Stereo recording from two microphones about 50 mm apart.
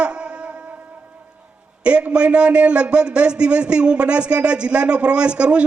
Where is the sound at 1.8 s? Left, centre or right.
Right.